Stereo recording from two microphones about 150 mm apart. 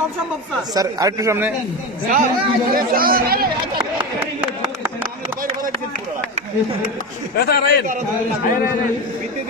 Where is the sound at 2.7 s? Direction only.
75° right (ahead or behind).